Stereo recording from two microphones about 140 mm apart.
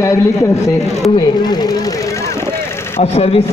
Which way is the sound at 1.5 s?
30° left (ahead or behind).